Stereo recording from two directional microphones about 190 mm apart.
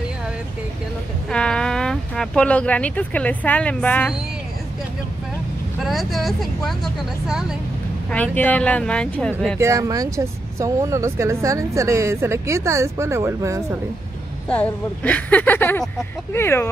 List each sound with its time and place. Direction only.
1.3 s speech: 5° left (ahead or behind)
5.8 s speech: centre (ahead or behind)
8.1 s speech: 10° left (ahead or behind)
9.6 s speech: 15° right (ahead or behind)
14.5 s speech: 10° left (ahead or behind)